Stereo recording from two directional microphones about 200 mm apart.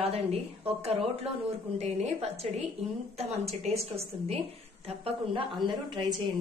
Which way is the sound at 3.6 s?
30° right (ahead or behind).